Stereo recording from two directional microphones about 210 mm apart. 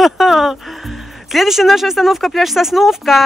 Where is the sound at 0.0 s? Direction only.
Centre (ahead or behind).